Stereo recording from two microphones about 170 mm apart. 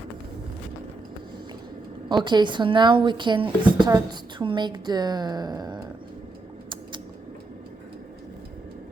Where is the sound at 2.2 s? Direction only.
25° right (ahead or behind).